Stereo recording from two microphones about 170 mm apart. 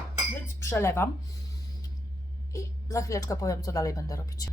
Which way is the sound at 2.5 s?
20° left (ahead or behind).